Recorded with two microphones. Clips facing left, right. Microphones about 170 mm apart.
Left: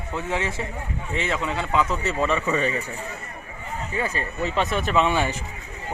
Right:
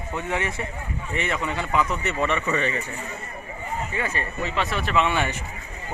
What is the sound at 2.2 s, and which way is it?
Speech, 10° left (ahead or behind).